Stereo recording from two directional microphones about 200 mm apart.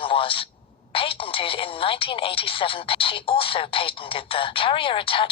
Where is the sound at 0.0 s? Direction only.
25° left (ahead or behind).